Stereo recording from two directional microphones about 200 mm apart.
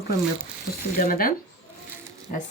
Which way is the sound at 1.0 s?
45° left (ahead or behind).